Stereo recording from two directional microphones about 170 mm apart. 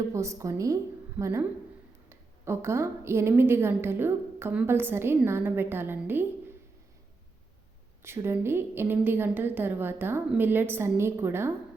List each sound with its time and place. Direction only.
0.1 s a woman's voice: 15° right (ahead or behind)
8.0 s a woman's voice: 15° right (ahead or behind)